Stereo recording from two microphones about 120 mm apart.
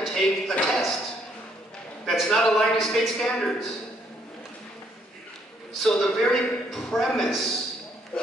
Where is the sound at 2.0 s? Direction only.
Centre (ahead or behind).